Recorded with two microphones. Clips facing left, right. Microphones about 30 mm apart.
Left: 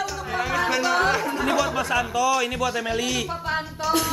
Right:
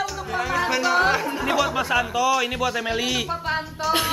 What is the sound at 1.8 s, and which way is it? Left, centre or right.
Speech, centre.